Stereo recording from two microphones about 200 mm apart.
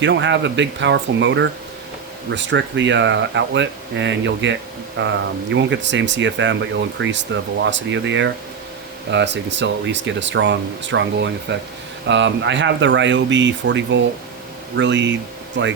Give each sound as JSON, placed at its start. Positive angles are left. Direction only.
{"t": 0.0, "sound": "speech", "side_deg": -65}